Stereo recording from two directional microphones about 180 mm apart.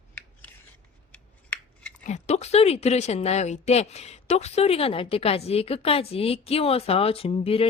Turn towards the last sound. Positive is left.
turn(degrees=35)  # may be behind; listen again after turning